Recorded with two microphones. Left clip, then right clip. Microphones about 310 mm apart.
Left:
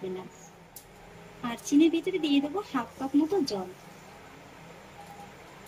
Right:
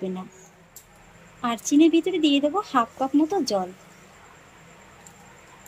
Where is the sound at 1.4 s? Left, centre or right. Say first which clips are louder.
Right 5 dB; centre.